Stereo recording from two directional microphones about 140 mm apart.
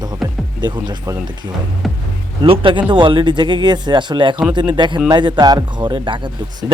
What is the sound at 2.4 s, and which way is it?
Speech, 40° right (ahead or behind).